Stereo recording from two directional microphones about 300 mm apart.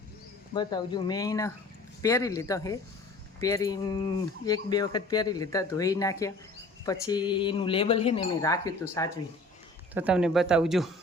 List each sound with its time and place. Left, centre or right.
0.5 s speech: centre
9.9 s speech: centre